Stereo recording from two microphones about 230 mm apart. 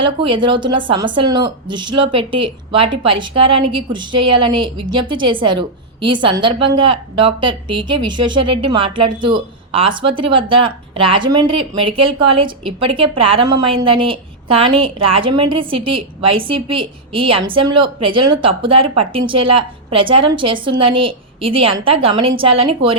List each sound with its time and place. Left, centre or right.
0.0 s speech: right